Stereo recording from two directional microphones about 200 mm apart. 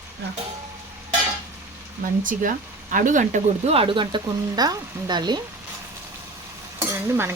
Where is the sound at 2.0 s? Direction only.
40° right (ahead or behind); by 5.4 s 20° right (ahead or behind).